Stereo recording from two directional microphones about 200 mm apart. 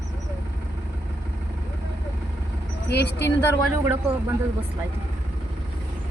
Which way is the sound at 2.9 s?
55° left (ahead or behind).